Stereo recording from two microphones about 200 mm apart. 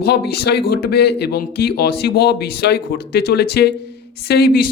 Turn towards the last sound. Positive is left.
turn(degrees=50)  # may be behind; listen again after turning